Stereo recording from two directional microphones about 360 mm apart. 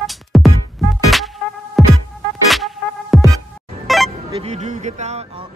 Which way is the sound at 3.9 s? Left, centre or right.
Centre.